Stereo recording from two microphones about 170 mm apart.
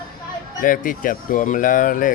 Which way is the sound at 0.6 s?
55° left (ahead or behind).